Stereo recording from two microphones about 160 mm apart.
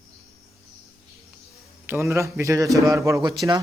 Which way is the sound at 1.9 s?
15° right (ahead or behind).